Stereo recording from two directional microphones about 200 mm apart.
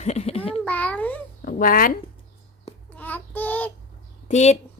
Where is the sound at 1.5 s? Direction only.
45° left (ahead or behind).